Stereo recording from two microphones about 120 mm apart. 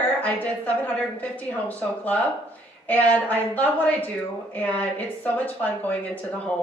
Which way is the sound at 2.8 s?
15° left (ahead or behind).